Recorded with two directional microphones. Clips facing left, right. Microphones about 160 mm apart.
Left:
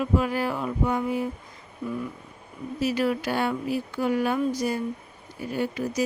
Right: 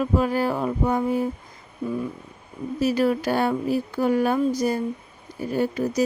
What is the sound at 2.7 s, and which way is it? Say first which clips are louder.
Speech: right 4 dB; 40° right (ahead or behind).